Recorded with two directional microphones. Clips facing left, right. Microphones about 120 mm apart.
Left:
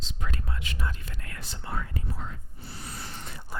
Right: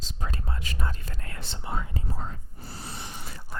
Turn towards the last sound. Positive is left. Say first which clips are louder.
# even
turn(degrees=-10)  # may be behind; listen again after turning